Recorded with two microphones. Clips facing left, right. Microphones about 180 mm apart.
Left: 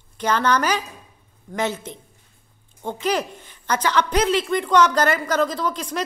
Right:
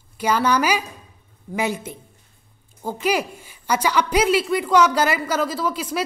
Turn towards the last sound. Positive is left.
turn(degrees=-5)  # may be behind; listen again after turning